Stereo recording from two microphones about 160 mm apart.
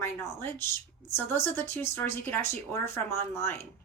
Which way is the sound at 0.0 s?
15° left (ahead or behind).